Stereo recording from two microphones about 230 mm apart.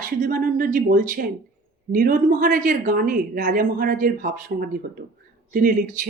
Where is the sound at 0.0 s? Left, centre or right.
Right.